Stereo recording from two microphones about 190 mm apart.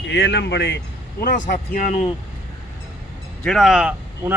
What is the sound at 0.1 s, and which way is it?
Speech, 70° left (ahead or behind).